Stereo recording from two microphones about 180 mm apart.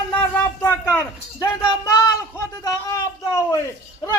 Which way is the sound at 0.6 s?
15° left (ahead or behind).